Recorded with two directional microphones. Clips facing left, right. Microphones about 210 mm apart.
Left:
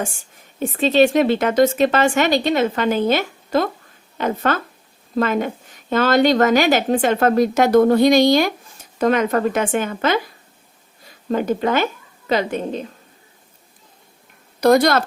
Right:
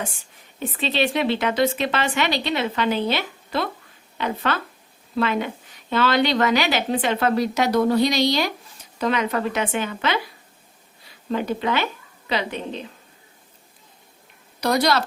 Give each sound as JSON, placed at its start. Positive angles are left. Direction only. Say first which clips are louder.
{"t": 0.0, "sound": "a woman's voice", "louder": "left 5 dB", "side_deg": 45}
{"t": 14.6, "sound": "a woman's voice", "louder": "left 6 dB", "side_deg": 50}